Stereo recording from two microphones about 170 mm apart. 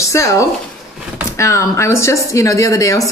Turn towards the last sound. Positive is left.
turn(degrees=20)  # may be behind; listen again after turning